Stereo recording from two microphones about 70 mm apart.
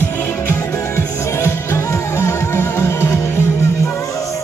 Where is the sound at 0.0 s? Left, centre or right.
Left.